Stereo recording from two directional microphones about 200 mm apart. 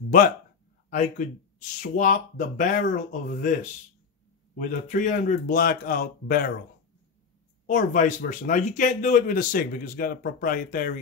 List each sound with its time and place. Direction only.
0.8 s speech: 40° left (ahead or behind)
4.6 s speech: 40° left (ahead or behind)
7.6 s speech: 40° left (ahead or behind)